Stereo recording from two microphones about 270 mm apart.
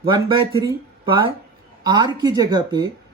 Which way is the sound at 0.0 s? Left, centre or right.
Centre.